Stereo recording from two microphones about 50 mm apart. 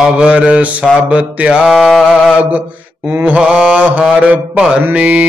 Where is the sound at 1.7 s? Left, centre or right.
Centre.